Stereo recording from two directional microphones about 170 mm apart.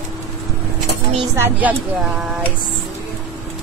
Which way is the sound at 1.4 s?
10° right (ahead or behind).